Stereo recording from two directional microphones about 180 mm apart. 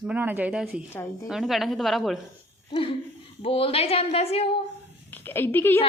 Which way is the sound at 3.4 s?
30° left (ahead or behind).